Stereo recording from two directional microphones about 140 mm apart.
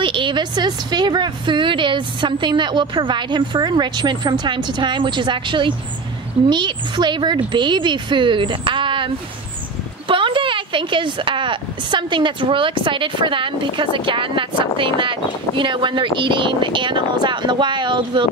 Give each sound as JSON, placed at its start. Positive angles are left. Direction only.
{"t": 0.0, "sound": "a woman's voice", "side_deg": -35}